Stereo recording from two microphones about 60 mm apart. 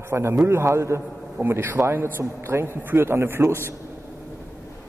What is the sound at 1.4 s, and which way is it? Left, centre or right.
A man's voice, right.